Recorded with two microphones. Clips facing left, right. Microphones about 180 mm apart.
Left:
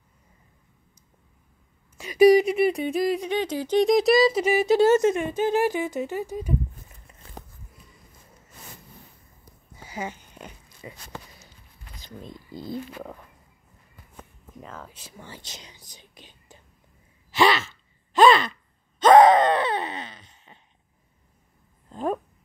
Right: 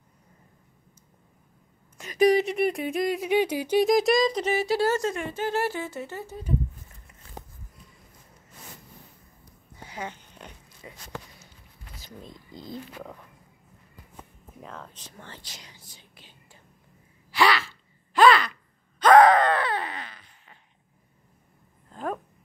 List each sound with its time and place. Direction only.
2.0 s speech: 10° left (ahead or behind)
3.3 s speech: 10° right (ahead or behind); by 6.5 s 15° left (ahead or behind)
9.4 s dog: 5° left (ahead or behind)
12.0 s speech: centre (ahead or behind)
14.6 s speech: 5° left (ahead or behind)
15.4 s whispering: 20° left (ahead or behind)
17.3 s a sound: 20° left (ahead or behind)
21.9 s a sound: 20° left (ahead or behind)